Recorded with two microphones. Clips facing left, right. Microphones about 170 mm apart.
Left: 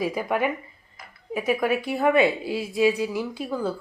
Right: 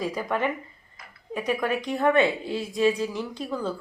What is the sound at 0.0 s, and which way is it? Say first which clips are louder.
A woman's voice: left 2 dB; 10° left (ahead or behind).